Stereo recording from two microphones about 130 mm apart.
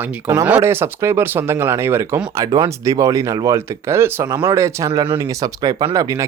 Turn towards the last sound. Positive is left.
turn(degrees=-25)  # may be behind; listen again after turning